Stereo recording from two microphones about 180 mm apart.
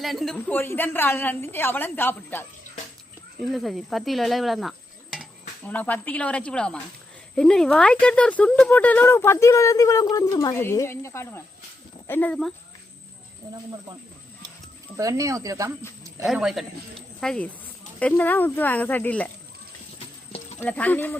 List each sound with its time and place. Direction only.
0.0 s speech: centre (ahead or behind)
3.4 s speech: centre (ahead or behind)
14.9 s speech: 20° right (ahead or behind)
16.2 s speech: centre (ahead or behind)
20.6 s speech: 10° left (ahead or behind)